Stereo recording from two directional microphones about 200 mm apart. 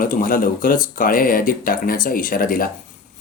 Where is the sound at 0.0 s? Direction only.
45° left (ahead or behind).